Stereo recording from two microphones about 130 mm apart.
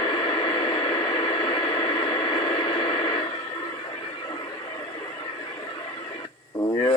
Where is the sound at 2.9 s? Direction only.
40° left (ahead or behind).